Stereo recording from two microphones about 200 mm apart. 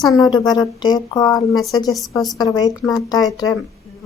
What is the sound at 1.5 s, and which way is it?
Speech, centre (ahead or behind).